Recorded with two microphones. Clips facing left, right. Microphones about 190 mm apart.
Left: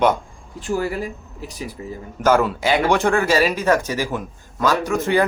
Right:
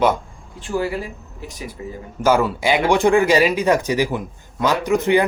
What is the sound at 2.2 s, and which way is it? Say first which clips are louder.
Speech: even; 10° right (ahead or behind).